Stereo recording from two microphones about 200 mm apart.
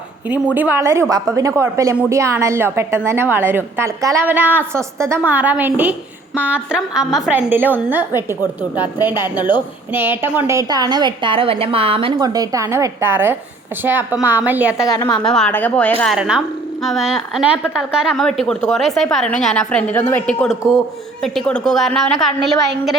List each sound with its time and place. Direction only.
0.5 s a woman's voice: 10° right (ahead or behind)
9.0 s a woman's voice: 10° right (ahead or behind)
14.8 s a woman's voice: 20° left (ahead or behind)
15.2 s a woman's voice: 5° left (ahead or behind)